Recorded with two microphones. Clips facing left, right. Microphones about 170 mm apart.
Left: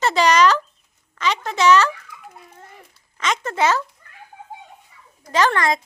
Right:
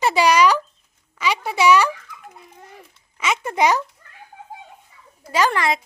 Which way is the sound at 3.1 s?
10° right (ahead or behind).